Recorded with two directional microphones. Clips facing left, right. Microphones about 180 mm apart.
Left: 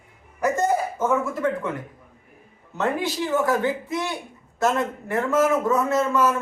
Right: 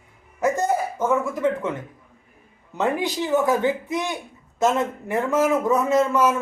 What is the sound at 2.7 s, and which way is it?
A man's voice, 15° right (ahead or behind).